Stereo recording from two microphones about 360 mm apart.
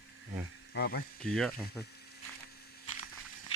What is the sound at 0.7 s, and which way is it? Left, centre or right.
Speech, left.